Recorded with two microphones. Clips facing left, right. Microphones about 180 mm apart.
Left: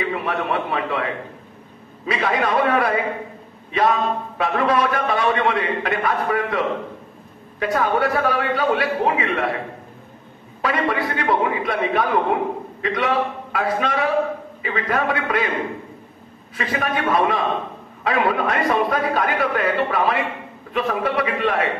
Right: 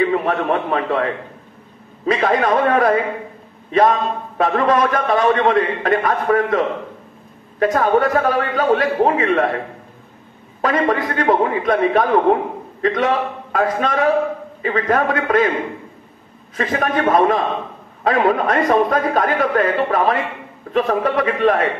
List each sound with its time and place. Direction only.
0.0 s a sound: 40° right (ahead or behind)
2.0 s a man's voice: 45° right (ahead or behind)
10.6 s a man's voice: 45° right (ahead or behind)
16.5 s a man's voice: 45° right (ahead or behind)